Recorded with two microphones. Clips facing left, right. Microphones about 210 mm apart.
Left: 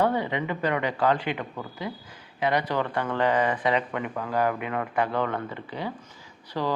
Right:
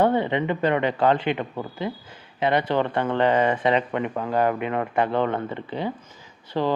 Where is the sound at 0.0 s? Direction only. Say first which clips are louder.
Right 4 dB; 25° right (ahead or behind).